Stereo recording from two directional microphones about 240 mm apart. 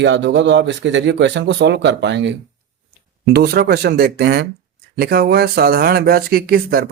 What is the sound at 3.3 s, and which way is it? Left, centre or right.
Speech, right.